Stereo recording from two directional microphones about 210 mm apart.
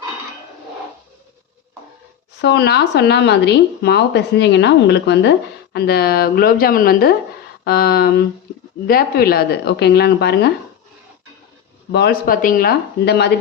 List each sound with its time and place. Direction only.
2.4 s speech: 50° left (ahead or behind)
11.9 s speech: 50° left (ahead or behind)